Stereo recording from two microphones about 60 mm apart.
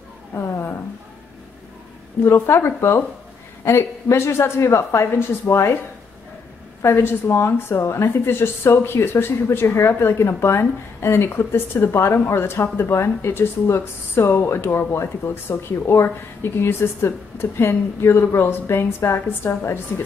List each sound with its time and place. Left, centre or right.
0.3 s a sound: left
2.2 s speech: left
7.2 s a woman's voice: left